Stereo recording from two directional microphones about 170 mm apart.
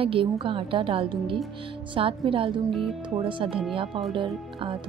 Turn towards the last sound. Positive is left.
turn(degrees=-30)  # may be behind; listen again after turning